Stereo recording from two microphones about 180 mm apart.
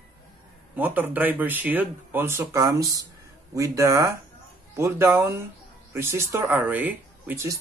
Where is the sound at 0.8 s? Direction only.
10° right (ahead or behind).